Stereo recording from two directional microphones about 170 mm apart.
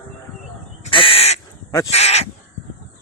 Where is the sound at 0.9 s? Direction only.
30° left (ahead or behind).